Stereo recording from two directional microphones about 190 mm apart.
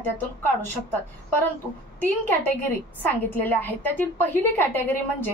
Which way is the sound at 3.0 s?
10° left (ahead or behind).